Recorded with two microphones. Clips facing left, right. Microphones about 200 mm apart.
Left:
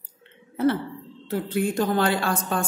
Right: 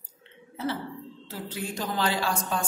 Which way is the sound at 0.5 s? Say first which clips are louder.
Left 9 dB; 55° left (ahead or behind).